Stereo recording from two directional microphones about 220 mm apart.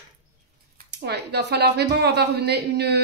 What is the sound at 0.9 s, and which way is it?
A woman's voice, 50° right (ahead or behind).